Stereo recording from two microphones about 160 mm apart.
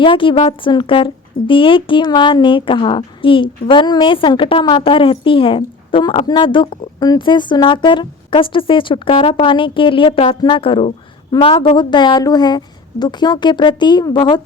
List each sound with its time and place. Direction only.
0.0 s a woman's voice: 30° left (ahead or behind)